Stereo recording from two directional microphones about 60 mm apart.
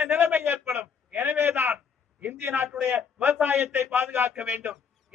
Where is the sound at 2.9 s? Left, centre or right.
Right.